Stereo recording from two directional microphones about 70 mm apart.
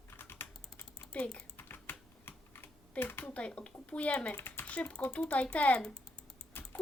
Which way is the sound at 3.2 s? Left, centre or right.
Centre.